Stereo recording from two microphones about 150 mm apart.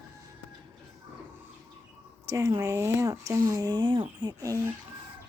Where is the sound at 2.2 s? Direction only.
20° right (ahead or behind).